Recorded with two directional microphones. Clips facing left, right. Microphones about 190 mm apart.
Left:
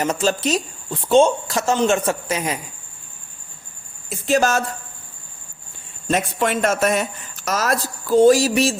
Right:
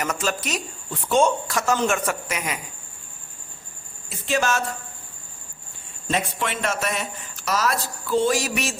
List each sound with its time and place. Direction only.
0.0 s a man's voice: 30° left (ahead or behind)
4.3 s speech: 40° left (ahead or behind)
6.1 s a man's voice: 45° left (ahead or behind)